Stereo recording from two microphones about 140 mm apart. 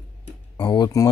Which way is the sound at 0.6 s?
30° left (ahead or behind).